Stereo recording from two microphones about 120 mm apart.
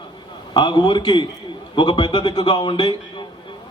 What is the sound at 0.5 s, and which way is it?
A man's voice, 40° left (ahead or behind).